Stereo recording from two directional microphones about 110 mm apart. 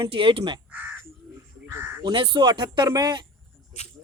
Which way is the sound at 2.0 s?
45° right (ahead or behind).